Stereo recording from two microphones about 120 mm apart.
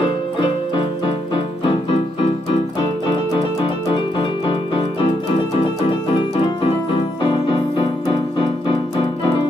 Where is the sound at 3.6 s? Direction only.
50° left (ahead or behind).